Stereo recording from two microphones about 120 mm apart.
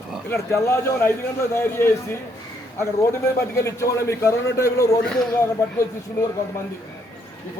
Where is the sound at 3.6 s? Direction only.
25° left (ahead or behind).